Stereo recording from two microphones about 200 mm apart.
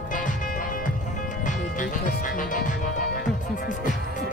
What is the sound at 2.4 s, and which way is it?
Music, 40° left (ahead or behind).